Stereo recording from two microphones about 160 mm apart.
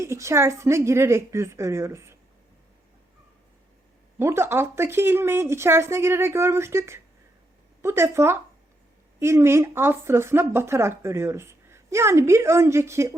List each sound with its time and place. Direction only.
0.0 s a woman's voice: 15° right (ahead or behind)
4.2 s a woman's voice: 15° right (ahead or behind)